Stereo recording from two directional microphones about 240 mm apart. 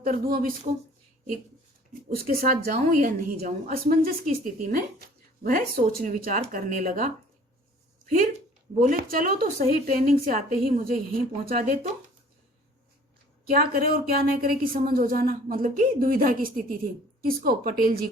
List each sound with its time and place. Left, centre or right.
0.0 s speech: right
2.0 s speech: right
8.7 s speech: right
13.6 s speech: right